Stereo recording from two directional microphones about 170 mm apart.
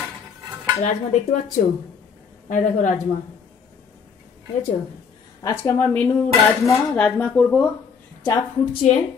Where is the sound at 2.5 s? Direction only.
50° left (ahead or behind).